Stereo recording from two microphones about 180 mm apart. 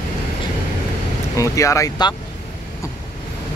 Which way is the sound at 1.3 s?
15° left (ahead or behind).